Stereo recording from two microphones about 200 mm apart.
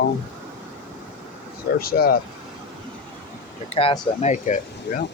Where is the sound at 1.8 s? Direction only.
50° left (ahead or behind).